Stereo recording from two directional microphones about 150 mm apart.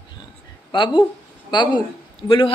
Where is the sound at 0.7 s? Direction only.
35° left (ahead or behind).